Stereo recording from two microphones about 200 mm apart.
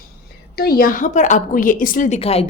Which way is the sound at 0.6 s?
50° left (ahead or behind).